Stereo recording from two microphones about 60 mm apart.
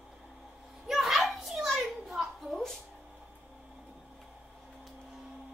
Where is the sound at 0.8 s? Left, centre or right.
Centre.